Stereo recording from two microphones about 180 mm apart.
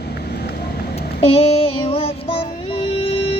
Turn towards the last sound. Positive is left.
turn(degrees=30)  # may be behind; listen again after turning